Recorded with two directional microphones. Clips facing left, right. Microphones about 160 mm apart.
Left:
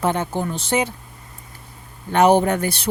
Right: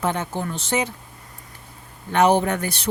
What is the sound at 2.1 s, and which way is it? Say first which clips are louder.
Speech: left 3 dB; 35° left (ahead or behind).